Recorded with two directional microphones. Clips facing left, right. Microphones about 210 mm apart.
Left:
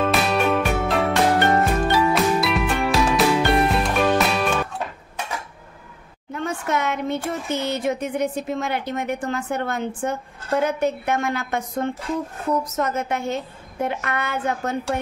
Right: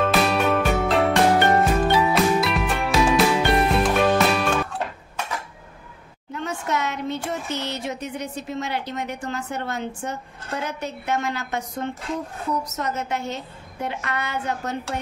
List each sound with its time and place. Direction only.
0.0 s music: centre (ahead or behind)
6.3 s speech: 55° left (ahead or behind)